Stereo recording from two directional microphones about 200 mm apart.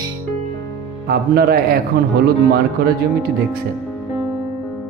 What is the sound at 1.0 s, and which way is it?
Speech, 45° right (ahead or behind).